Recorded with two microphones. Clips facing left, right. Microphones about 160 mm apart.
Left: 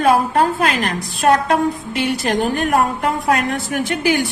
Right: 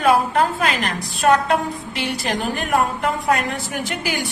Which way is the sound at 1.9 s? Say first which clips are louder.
Left 5 dB; 45° left (ahead or behind).